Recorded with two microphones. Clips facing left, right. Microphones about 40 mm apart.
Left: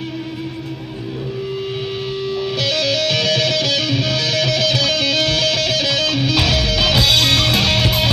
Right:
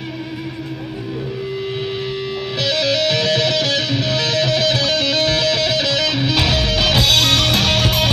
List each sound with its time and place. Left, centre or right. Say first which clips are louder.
2.6 s music: right 3 dB; right
7.0 s music: even; centre